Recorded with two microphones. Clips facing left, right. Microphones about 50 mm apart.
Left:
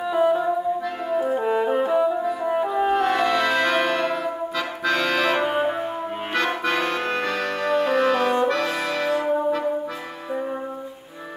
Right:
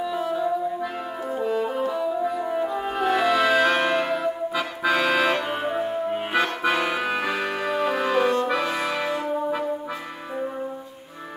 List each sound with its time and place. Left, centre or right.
0.1 s music: centre
1.1 s brass instrument: centre
1.4 s brass instrument: left
2.4 s french horn: centre
2.9 s music: centre
5.4 s music: centre
6.3 s accordion: centre
8.5 s music: centre